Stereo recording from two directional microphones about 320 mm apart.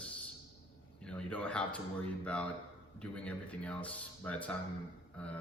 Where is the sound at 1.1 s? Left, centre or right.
Centre.